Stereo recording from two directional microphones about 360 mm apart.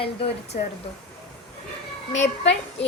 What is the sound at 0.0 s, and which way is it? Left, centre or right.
Speech, centre.